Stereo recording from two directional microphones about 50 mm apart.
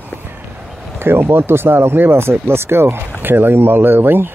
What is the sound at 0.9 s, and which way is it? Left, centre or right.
Speech, right.